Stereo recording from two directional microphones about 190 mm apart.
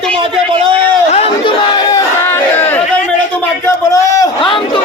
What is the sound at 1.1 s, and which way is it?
Crowd, 30° left (ahead or behind).